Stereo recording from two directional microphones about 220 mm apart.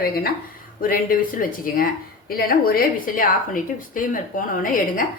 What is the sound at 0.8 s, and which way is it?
Speech, 40° left (ahead or behind).